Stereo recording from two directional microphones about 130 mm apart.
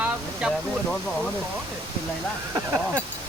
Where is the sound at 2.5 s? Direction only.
20° right (ahead or behind).